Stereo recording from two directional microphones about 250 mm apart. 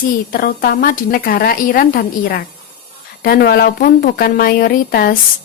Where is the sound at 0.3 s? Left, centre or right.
Left.